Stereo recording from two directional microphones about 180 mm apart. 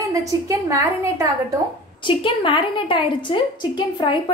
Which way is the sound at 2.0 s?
30° left (ahead or behind).